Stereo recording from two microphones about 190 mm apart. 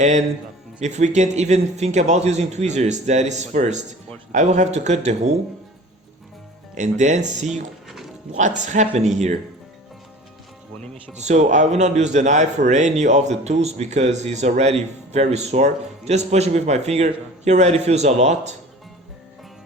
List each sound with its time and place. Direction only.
0.8 s speech: 40° right (ahead or behind)
6.7 s speech: 40° right (ahead or behind)
7.9 s music: centre (ahead or behind)
8.3 s speech: 40° right (ahead or behind)
11.1 s speech: 35° right (ahead or behind)